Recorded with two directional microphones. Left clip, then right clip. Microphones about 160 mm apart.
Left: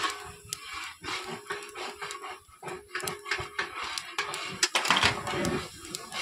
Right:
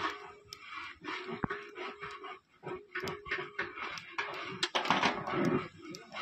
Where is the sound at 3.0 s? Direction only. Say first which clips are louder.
Left 4 dB; 25° right (ahead or behind).